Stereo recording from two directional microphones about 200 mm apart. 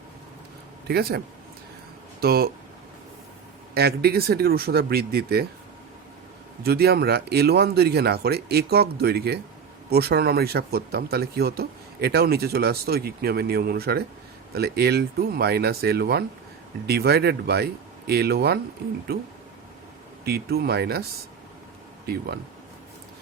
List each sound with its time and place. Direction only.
0.9 s speech: 50° right (ahead or behind)
2.2 s speech: 50° right (ahead or behind)
3.8 s speech: 50° right (ahead or behind)
6.6 s speech: 50° right (ahead or behind)
20.2 s speech: 50° right (ahead or behind)
22.0 s speech: 50° right (ahead or behind)